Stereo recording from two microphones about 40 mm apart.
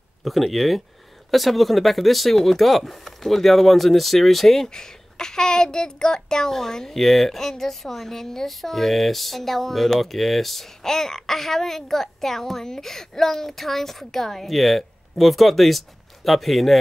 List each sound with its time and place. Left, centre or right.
0.2 s speech: centre
4.7 s a child's voice: centre